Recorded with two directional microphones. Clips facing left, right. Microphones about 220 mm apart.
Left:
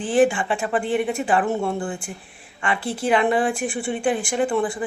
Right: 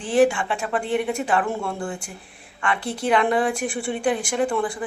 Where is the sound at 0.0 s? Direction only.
5° left (ahead or behind).